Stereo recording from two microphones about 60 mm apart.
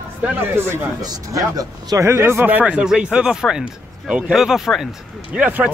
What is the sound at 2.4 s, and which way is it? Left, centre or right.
Speech, right.